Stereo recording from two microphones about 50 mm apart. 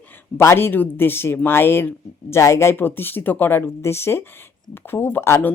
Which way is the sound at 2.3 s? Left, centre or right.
Left.